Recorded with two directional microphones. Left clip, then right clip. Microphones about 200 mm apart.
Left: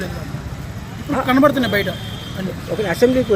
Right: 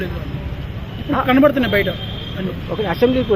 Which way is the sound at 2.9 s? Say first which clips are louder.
Left 1 dB; 10° left (ahead or behind).